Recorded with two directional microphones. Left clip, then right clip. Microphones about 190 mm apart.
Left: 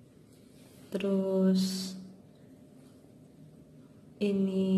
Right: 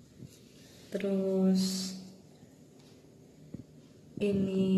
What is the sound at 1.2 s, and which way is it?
Speech, centre (ahead or behind).